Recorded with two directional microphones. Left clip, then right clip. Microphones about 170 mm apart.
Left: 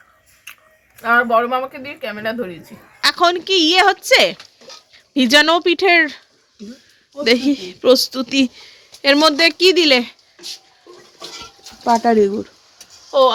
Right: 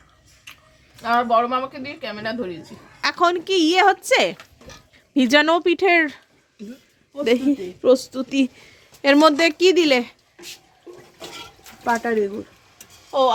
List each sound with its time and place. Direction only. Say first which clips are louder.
1.0 s speech: left 4 dB; 10° left (ahead or behind)
3.0 s a woman's voice: left 4 dB; 5° right (ahead or behind)
7.3 s speech: left 4 dB; 5° left (ahead or behind)
9.0 s a woman's voice: left 2 dB; 15° right (ahead or behind)
11.9 s speech: left 7 dB; 60° left (ahead or behind)
13.1 s speech: left 5 dB; 5° left (ahead or behind)